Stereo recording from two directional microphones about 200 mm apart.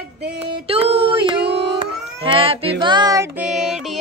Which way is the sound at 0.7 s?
30° right (ahead or behind).